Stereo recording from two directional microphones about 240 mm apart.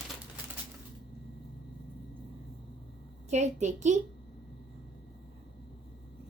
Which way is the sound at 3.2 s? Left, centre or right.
Right.